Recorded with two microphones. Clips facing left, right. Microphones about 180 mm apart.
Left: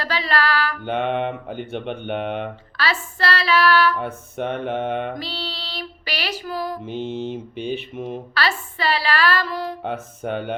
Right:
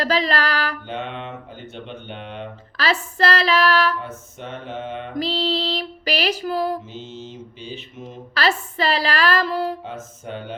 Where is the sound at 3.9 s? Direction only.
60° left (ahead or behind).